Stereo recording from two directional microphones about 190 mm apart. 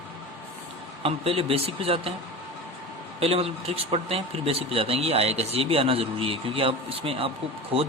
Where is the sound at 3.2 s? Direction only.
30° right (ahead or behind).